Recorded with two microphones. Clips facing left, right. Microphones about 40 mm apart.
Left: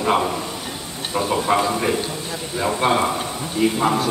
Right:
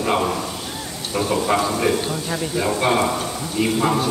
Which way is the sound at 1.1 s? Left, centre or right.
Centre.